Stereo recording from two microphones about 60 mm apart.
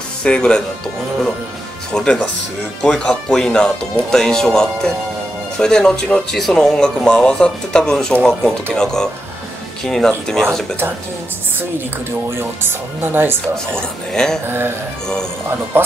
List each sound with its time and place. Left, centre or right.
0.2 s speech: centre
1.9 s speech: centre
12.3 s speech: right
13.7 s speech: centre
15.7 s speech: right